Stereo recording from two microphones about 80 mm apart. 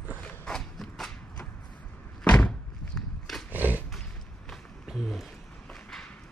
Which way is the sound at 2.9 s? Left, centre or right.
Centre.